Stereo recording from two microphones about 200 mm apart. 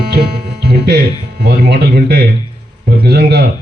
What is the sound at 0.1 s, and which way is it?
Music, 55° right (ahead or behind).